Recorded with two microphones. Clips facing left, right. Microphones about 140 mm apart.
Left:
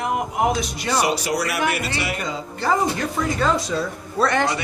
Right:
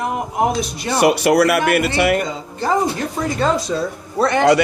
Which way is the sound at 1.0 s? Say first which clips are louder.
Right 13 dB; 65° right (ahead or behind).